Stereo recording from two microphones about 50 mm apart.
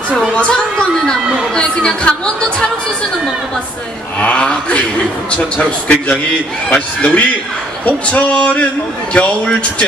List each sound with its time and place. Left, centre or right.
0.3 s speech: centre
4.2 s a sound: left
5.6 s speech: left